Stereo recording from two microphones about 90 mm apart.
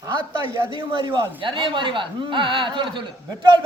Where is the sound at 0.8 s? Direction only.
65° right (ahead or behind).